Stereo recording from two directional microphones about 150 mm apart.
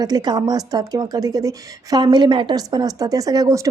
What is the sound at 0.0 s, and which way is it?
A woman's voice, 25° right (ahead or behind).